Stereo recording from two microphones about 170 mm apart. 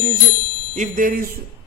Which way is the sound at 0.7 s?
50° right (ahead or behind).